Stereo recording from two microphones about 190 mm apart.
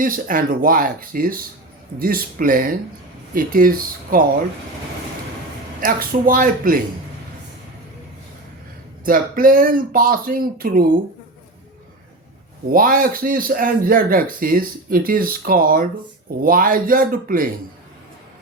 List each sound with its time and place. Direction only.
0.0 s a man's voice: 45° right (ahead or behind)
5.8 s a man's voice: 50° right (ahead or behind)
9.0 s a man's voice: 45° right (ahead or behind)
12.6 s a man's voice: 45° right (ahead or behind)